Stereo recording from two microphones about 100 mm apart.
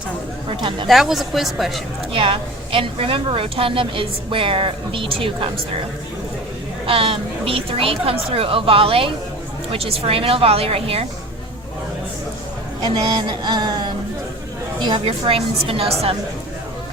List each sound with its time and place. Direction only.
0.5 s a woman's voice: 55° right (ahead or behind)
0.9 s a woman's voice: centre (ahead or behind)
2.1 s a woman's voice: 65° right (ahead or behind)
6.8 s a woman's voice: 65° right (ahead or behind)
12.8 s a sound: 45° right (ahead or behind)
14.8 s a woman's voice: 50° right (ahead or behind)
15.0 s a woman's voice: 70° right (ahead or behind)